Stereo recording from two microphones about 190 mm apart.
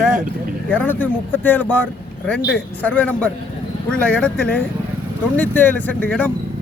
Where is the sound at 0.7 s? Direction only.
10° left (ahead or behind).